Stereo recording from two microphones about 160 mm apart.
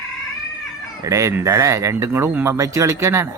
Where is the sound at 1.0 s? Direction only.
20° right (ahead or behind).